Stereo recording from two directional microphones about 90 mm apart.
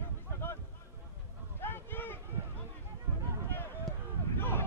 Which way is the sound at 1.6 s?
25° left (ahead or behind).